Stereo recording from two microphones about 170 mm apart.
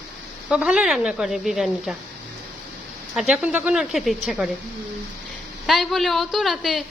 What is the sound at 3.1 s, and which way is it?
A woman's voice, 5° right (ahead or behind).